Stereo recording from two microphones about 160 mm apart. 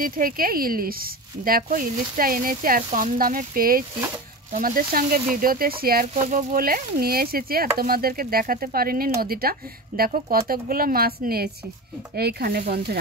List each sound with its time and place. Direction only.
0.0 s speech: 65° right (ahead or behind)